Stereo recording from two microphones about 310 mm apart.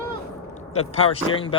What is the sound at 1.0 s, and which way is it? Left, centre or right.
Speech, centre.